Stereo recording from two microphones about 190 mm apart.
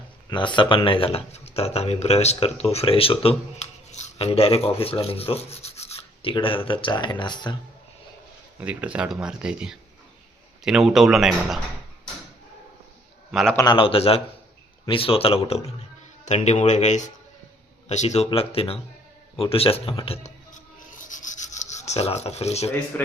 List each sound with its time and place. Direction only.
0.3 s speech: 25° left (ahead or behind)
8.6 s speech: 5° right (ahead or behind)
13.3 s speech: centre (ahead or behind)
13.6 s a man's voice: 25° left (ahead or behind)
19.4 s rub: 30° left (ahead or behind)